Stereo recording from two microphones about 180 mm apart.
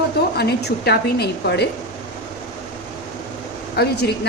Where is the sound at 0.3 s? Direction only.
65° left (ahead or behind).